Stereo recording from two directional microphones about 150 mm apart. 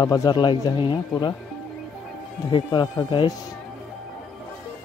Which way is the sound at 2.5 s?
30° left (ahead or behind).